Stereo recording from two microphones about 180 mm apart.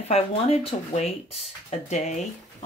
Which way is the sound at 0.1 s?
35° left (ahead or behind).